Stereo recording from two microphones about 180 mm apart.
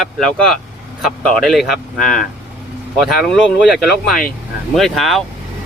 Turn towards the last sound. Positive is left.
turn(degrees=0)  # may be behind; listen again after turning